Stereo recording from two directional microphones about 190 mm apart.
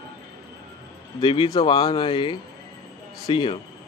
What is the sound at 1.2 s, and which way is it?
Speech, 25° left (ahead or behind).